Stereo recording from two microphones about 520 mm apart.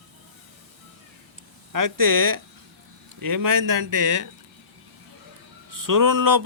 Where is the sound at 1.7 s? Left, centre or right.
Right.